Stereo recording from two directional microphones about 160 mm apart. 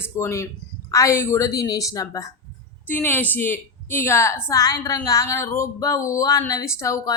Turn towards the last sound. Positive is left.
turn(degrees=20)  # may be behind; listen again after turning